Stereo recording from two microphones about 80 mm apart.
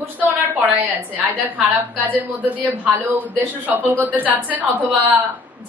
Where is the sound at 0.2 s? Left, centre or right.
Right.